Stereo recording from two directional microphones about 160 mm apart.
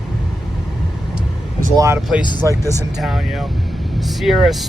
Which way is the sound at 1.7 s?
20° right (ahead or behind).